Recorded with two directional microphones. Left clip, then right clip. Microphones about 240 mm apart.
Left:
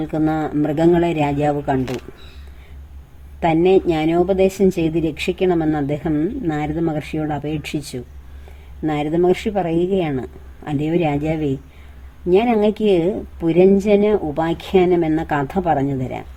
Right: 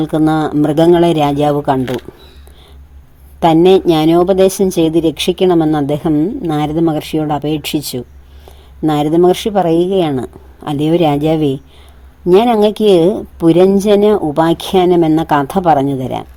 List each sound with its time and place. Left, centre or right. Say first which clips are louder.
0.0 s speech: right 7 dB; right
3.4 s speech: right 7 dB; right